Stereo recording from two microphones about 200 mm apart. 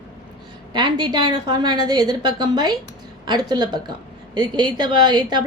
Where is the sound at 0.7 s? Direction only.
25° right (ahead or behind).